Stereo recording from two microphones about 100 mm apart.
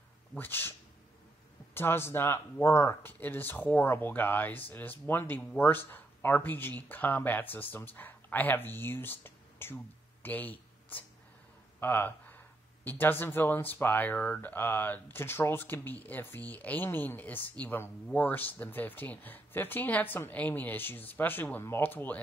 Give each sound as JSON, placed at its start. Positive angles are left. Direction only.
{"t": 0.4, "sound": "speech", "side_deg": 20}